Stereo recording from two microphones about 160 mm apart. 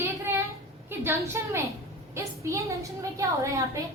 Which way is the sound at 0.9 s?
15° right (ahead or behind).